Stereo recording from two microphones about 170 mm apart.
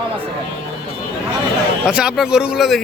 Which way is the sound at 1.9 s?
5° right (ahead or behind).